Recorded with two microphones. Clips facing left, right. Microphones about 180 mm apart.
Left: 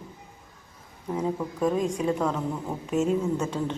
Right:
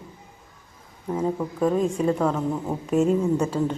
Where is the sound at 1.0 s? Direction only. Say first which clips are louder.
Right 3 dB; 5° right (ahead or behind).